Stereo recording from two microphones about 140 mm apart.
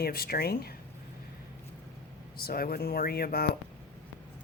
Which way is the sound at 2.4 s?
90° left.